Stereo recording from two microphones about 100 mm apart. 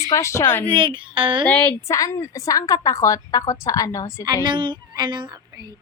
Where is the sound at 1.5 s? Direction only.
15° left (ahead or behind).